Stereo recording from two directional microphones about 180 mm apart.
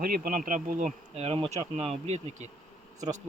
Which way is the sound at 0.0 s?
55° right (ahead or behind).